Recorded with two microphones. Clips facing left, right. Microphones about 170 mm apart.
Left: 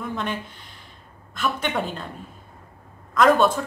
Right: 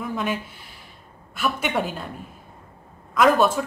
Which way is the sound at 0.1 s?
5° right (ahead or behind).